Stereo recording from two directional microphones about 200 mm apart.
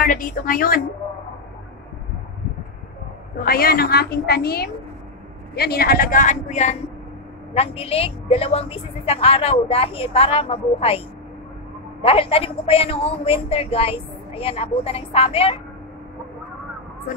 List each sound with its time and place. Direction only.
0.0 s a woman's voice: 45° left (ahead or behind)
3.4 s a woman's voice: 50° left (ahead or behind); by 11.0 s 30° left (ahead or behind)
12.0 s a woman's voice: 30° left (ahead or behind)